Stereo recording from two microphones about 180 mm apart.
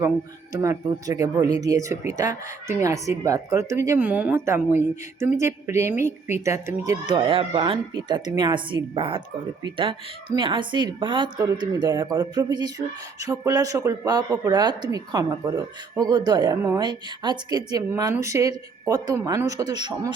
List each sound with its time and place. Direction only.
0.5 s speech: 20° right (ahead or behind)